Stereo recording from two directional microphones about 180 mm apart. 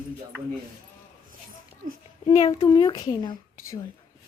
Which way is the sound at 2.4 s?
20° left (ahead or behind).